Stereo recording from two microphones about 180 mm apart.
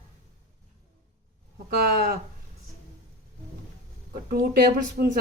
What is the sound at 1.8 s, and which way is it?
Speech, 60° right (ahead or behind).